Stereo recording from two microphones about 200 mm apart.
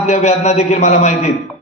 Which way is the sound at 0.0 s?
35° left (ahead or behind).